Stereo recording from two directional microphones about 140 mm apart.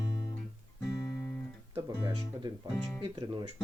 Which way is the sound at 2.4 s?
35° right (ahead or behind).